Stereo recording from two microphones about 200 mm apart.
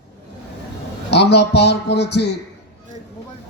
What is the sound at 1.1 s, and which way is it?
Speech, 55° left (ahead or behind).